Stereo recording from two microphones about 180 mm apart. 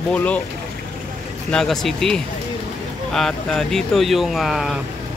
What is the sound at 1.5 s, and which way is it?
Speech, 5° left (ahead or behind).